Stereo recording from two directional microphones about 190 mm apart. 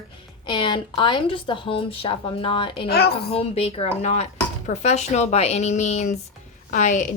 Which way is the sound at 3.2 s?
30° left (ahead or behind).